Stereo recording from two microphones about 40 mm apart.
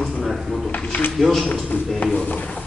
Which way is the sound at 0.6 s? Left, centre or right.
Left.